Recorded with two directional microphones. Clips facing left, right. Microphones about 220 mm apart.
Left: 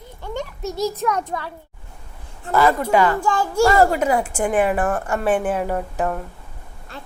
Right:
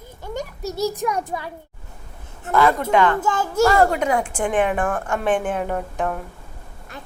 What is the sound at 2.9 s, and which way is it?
Speech, 10° left (ahead or behind).